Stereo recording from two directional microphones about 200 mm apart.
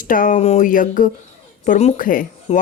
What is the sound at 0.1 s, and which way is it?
Speech, 40° left (ahead or behind).